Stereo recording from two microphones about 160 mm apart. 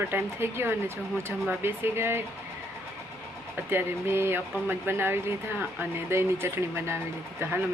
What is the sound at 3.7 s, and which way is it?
Speech, 15° right (ahead or behind).